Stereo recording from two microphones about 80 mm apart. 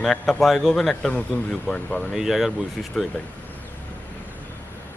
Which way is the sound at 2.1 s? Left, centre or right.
Centre.